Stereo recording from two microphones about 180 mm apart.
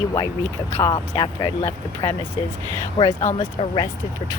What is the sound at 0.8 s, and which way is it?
Speech, 25° left (ahead or behind).